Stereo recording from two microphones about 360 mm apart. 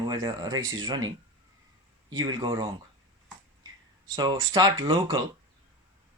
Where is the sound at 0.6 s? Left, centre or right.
Right.